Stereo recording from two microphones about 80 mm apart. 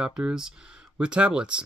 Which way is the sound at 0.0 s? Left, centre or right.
Centre.